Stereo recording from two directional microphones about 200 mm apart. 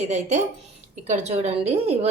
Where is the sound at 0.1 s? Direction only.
35° right (ahead or behind).